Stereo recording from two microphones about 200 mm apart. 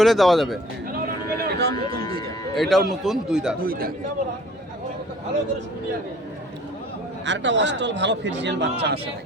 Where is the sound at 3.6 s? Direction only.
45° right (ahead or behind).